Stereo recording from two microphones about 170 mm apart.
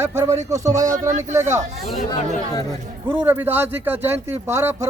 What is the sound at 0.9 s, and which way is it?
Speech, 50° right (ahead or behind).